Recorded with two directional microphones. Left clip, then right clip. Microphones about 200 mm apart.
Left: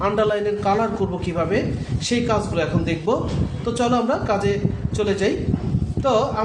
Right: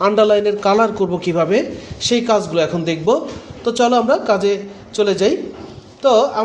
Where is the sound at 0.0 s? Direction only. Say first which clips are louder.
Right 7 dB; 40° right (ahead or behind).